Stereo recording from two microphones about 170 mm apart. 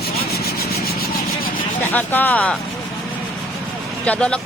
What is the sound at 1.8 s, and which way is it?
Speech, 10° left (ahead or behind).